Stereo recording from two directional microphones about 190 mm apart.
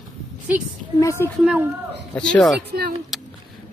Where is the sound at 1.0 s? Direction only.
15° left (ahead or behind).